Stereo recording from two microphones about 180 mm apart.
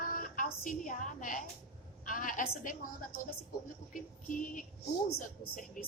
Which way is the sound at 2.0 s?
45° left (ahead or behind).